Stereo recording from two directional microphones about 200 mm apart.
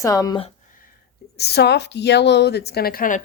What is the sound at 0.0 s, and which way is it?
Speech, 15° left (ahead or behind).